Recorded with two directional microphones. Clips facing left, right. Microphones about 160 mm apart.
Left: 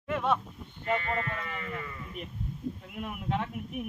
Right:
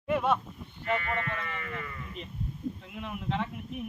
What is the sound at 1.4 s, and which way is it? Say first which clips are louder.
A man's voice: even; 20° left (ahead or behind).